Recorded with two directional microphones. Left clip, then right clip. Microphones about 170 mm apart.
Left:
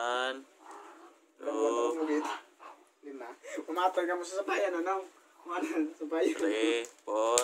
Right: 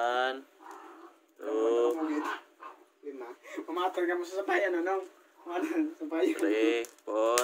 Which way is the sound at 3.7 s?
35° left (ahead or behind).